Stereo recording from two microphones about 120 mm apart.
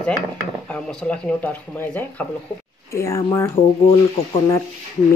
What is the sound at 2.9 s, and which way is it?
Speech, 25° left (ahead or behind).